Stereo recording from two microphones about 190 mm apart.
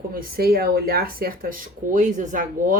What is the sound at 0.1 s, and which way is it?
Speech, 50° right (ahead or behind).